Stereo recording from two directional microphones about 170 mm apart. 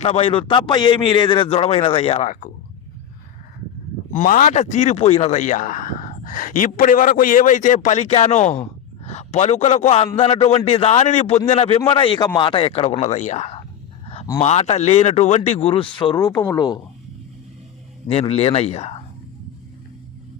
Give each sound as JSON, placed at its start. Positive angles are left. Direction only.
{"t": 0.0, "sound": "speech", "side_deg": 35}
{"t": 4.1, "sound": "a man's voice", "side_deg": 50}
{"t": 18.1, "sound": "speech", "side_deg": 35}